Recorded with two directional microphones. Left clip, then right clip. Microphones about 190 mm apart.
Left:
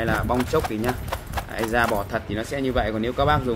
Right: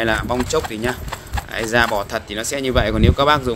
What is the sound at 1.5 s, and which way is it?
Speech, 55° right (ahead or behind).